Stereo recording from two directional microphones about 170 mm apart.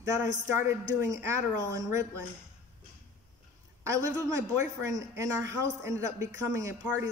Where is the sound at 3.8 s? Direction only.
20° right (ahead or behind).